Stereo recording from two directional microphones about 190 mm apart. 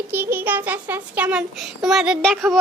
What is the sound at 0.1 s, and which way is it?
A child's voice, 10° right (ahead or behind).